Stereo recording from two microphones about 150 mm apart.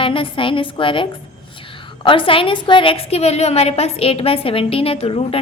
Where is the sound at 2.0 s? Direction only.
35° left (ahead or behind).